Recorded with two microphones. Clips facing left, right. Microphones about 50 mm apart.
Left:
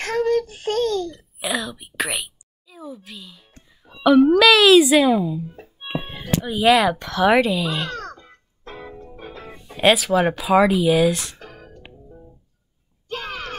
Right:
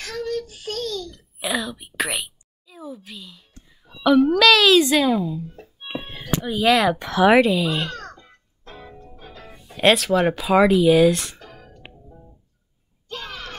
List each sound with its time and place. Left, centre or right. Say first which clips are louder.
0.0 s a sound: left 7 dB; left
1.4 s a sound: even; centre
3.6 s music: left 2 dB; centre
6.4 s a child's voice: left 2 dB; centre
7.0 s a child's voice: right 2 dB; centre
8.0 s music: left 4 dB; left
8.6 s keyboard: left 4 dB; left
9.1 s music: left 5 dB; left
9.5 s speech: even; centre
11.4 s music: left 2 dB; centre
13.1 s a sound: left 4 dB; left